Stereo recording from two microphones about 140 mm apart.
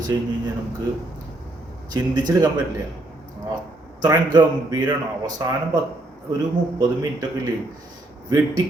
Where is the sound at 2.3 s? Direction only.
20° right (ahead or behind).